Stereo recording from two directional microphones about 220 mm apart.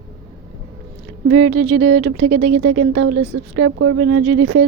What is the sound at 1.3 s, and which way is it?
Speech, 65° right (ahead or behind).